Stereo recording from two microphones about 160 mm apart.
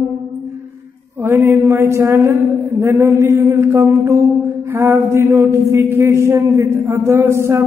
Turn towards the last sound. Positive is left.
turn(degrees=-15)  # may be behind; listen again after turning